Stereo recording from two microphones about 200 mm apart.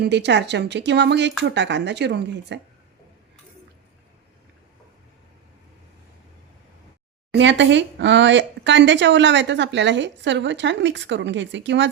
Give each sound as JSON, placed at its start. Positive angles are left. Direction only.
{"t": 0.0, "sound": "speech", "side_deg": -60}
{"t": 7.3, "sound": "speech", "side_deg": -65}